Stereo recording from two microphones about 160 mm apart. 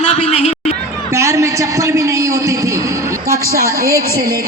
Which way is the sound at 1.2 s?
20° right (ahead or behind).